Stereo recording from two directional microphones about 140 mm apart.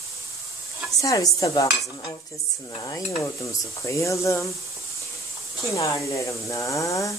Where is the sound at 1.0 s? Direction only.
25° left (ahead or behind).